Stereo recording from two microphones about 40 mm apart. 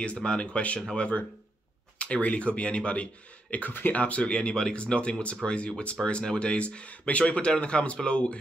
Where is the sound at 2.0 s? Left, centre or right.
Left.